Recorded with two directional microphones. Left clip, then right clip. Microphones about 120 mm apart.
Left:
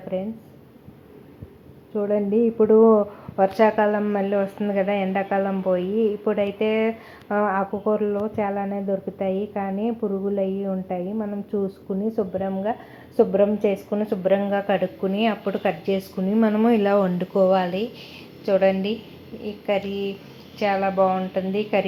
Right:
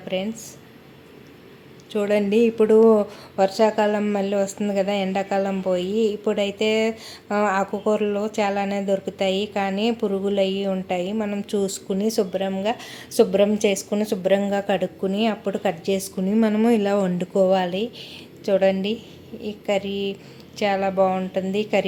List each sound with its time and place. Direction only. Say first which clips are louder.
1.9 s speech: right 2 dB; 20° right (ahead or behind)
3.3 s a woman's voice: even; 10° right (ahead or behind)